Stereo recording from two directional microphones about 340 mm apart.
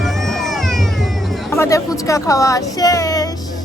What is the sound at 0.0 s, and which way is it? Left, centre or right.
Music, centre.